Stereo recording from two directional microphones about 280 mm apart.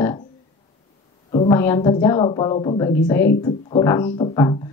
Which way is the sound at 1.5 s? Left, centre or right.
Centre.